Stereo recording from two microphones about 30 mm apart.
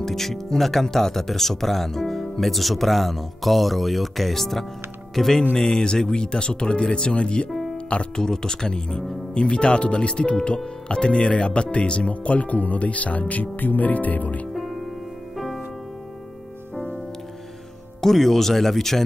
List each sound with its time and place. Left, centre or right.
0.0 s speech: centre
2.5 s speech: centre
5.6 s speech: centre
7.7 s music: left
8.2 s speech: left
12.1 s speech: left
15.3 s music: centre
18.0 s speech: centre